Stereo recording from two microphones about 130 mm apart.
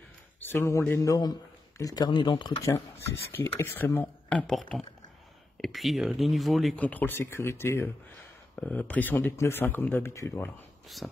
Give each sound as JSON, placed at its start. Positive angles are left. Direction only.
{"t": 0.4, "sound": "a man's voice", "side_deg": 15}
{"t": 2.6, "sound": "speech", "side_deg": 20}
{"t": 6.8, "sound": "speech", "side_deg": 10}